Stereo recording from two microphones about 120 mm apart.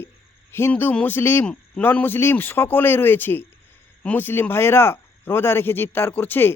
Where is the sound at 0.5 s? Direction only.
20° left (ahead or behind).